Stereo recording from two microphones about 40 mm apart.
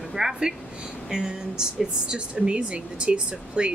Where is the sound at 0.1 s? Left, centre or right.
Centre.